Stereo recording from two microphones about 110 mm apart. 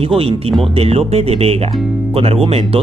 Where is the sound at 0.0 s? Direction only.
60° right (ahead or behind).